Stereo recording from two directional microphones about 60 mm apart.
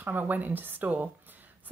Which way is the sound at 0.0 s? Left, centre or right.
Right.